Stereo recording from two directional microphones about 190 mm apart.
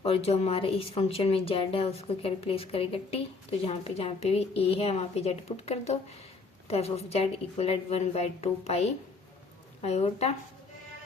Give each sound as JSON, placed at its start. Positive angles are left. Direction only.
{"t": 0.0, "sound": "speech", "side_deg": 30}